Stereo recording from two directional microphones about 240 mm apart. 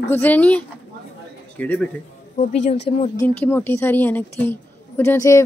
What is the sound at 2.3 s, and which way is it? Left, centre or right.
Speech, left.